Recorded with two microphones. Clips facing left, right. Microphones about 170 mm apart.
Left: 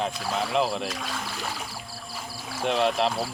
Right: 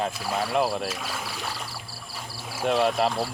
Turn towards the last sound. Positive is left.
turn(degrees=0)  # may be behind; listen again after turning